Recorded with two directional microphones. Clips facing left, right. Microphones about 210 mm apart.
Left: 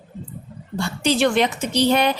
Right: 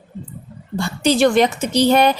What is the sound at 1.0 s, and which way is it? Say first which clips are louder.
A woman's voice: right 4 dB; 40° right (ahead or behind).